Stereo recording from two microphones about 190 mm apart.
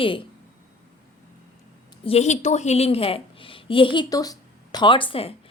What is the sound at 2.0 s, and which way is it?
A woman's voice, 35° left (ahead or behind).